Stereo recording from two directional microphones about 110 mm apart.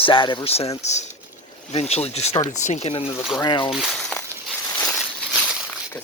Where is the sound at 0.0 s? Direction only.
50° left (ahead or behind).